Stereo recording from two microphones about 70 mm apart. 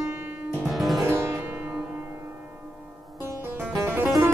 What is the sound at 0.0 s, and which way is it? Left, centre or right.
Music, right.